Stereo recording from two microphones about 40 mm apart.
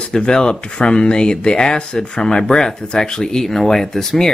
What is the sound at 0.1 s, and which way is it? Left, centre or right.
Speech, centre.